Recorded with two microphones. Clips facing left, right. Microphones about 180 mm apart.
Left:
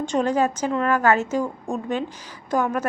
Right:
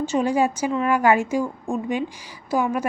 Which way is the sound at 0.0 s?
5° right (ahead or behind).